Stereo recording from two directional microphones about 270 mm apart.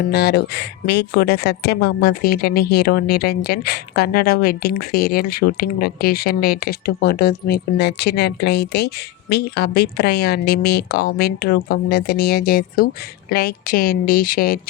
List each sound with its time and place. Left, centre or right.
0.0 s speech: left